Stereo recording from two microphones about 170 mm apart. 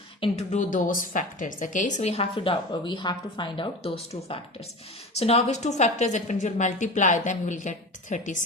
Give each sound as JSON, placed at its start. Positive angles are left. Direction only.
{"t": 0.2, "sound": "a woman's voice", "side_deg": 40}